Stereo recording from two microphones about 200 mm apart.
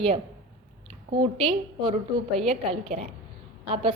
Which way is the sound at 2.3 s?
30° right (ahead or behind).